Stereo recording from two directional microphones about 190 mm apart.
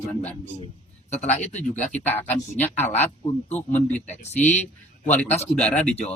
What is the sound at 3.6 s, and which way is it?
Speech, 35° left (ahead or behind).